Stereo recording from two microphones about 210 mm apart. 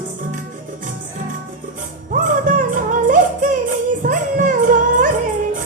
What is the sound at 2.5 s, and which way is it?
Music, 40° right (ahead or behind).